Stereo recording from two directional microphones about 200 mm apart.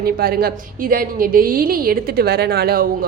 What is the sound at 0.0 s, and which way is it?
A woman's voice, 50° right (ahead or behind).